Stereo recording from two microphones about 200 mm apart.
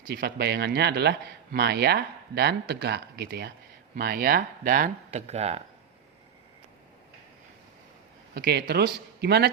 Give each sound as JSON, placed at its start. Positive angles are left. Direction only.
{"t": 0.1, "sound": "speech", "side_deg": -55}
{"t": 8.4, "sound": "speech", "side_deg": -55}